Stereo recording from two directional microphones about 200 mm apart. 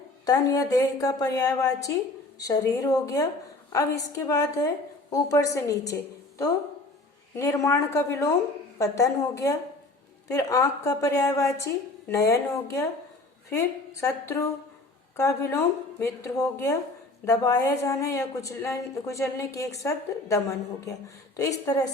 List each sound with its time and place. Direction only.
0.3 s a woman's voice: 20° left (ahead or behind)
7.3 s a woman's voice: 15° left (ahead or behind)